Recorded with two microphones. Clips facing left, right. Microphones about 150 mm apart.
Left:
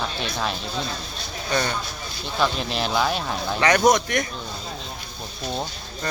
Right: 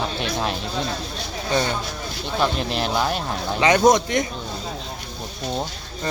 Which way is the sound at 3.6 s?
20° right (ahead or behind).